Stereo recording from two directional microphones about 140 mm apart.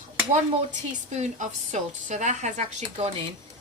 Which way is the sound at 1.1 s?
60° right (ahead or behind).